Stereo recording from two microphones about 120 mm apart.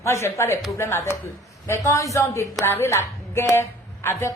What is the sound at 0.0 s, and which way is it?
A woman's voice, 25° left (ahead or behind).